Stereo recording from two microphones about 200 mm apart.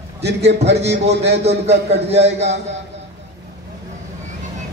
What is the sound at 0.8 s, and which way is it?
A man's voice, 60° right (ahead or behind).